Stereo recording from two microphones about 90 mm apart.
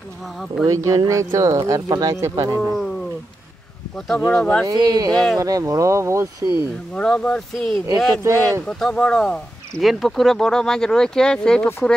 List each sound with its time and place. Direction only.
0.7 s speech: 40° right (ahead or behind)
4.2 s speech: 10° left (ahead or behind)
4.6 s speech: 45° right (ahead or behind)
5.1 s speech: 5° left (ahead or behind)
5.4 s speech: 40° right (ahead or behind)
7.0 s speech: 10° left (ahead or behind)
8.2 s speech: 35° right (ahead or behind)
8.6 s speech: 5° left (ahead or behind)